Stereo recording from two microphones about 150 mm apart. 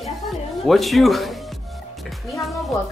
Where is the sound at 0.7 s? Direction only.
Centre (ahead or behind).